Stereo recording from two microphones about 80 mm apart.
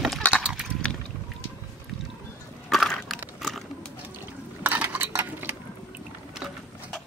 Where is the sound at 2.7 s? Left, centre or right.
Centre.